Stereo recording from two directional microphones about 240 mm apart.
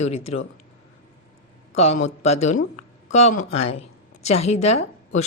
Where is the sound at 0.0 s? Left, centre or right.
Left.